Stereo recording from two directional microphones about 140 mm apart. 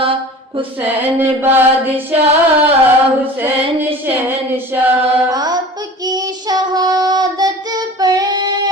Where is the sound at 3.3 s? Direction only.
15° right (ahead or behind).